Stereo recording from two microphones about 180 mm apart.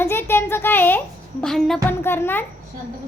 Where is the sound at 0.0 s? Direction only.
15° left (ahead or behind).